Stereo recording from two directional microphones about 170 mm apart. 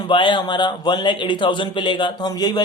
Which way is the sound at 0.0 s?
30° left (ahead or behind).